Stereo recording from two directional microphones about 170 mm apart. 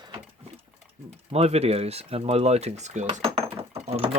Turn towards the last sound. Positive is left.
turn(degrees=-35)  # may be behind; listen again after turning